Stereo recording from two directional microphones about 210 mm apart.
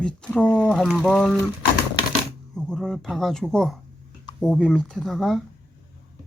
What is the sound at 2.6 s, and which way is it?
A woman's voice, 5° left (ahead or behind).